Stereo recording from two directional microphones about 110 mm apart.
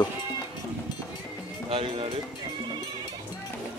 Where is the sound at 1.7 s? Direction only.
55° right (ahead or behind).